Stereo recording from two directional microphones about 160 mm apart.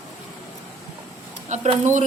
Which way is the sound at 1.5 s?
45° right (ahead or behind).